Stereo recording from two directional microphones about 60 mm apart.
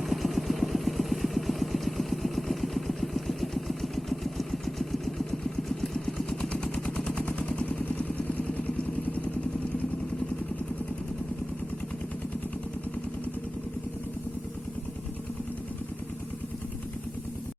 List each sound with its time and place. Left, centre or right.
0.1 s vehicle: centre; by 8.7 s left